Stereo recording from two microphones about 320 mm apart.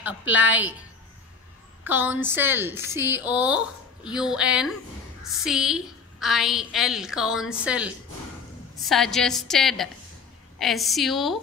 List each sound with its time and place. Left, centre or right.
0.0 s a woman's voice: centre
1.9 s a woman's voice: centre